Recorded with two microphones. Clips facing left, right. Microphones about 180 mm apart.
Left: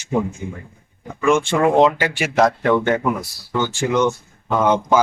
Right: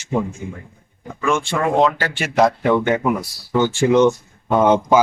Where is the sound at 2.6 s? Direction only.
15° right (ahead or behind).